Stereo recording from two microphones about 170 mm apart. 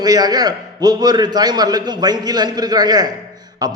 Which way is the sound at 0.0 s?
25° right (ahead or behind).